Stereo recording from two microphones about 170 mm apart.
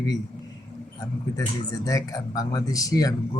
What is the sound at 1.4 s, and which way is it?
Speech, 20° left (ahead or behind).